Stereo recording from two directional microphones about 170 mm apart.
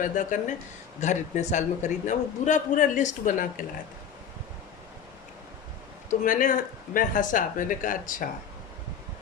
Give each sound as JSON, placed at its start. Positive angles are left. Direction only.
{"t": 0.0, "sound": "a man's voice", "side_deg": 50}
{"t": 6.1, "sound": "a man's voice", "side_deg": 50}